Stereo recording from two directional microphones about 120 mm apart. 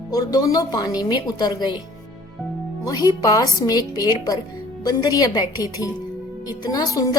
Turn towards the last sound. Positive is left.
turn(degrees=30)  # may be behind; listen again after turning